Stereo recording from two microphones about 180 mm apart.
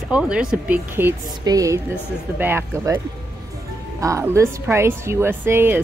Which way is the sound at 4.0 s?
15° right (ahead or behind).